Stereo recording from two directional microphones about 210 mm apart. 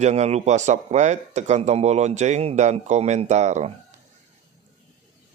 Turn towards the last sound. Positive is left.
turn(degrees=-35)  # may be behind; listen again after turning